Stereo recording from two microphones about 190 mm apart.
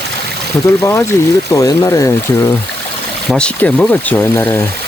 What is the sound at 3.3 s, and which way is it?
Speech, 5° left (ahead or behind).